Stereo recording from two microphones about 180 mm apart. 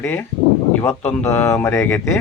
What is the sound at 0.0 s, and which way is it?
A man's voice, 15° left (ahead or behind).